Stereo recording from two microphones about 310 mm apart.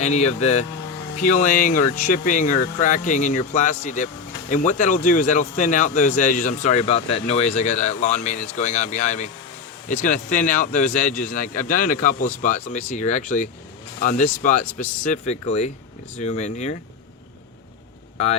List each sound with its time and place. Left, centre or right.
0.0 s speech: left